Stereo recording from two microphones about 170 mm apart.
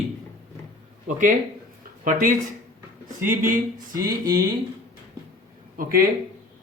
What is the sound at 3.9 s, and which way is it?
Speech, 20° right (ahead or behind).